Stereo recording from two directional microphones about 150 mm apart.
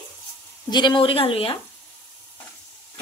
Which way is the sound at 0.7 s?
30° left (ahead or behind).